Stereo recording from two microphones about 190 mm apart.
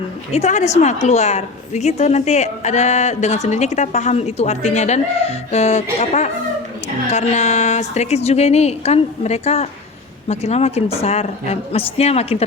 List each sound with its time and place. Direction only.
0.3 s a woman's voice: 35° left (ahead or behind)